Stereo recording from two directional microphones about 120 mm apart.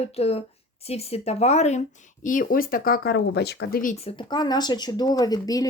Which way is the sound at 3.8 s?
60° left (ahead or behind).